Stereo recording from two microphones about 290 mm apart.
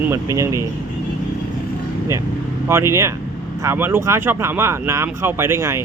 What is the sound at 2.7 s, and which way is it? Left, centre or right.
Speech, centre.